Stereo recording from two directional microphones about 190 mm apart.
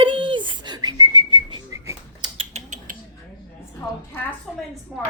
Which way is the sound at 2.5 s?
40° right (ahead or behind).